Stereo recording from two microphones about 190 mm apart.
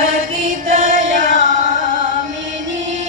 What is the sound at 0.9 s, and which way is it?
Music, 45° right (ahead or behind).